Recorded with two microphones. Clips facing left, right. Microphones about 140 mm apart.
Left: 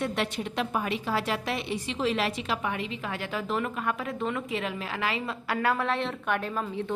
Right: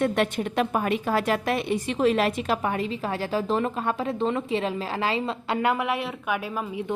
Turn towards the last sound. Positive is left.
turn(degrees=-10)  # may be behind; listen again after turning